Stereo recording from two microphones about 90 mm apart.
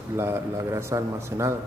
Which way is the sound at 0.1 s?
30° right (ahead or behind).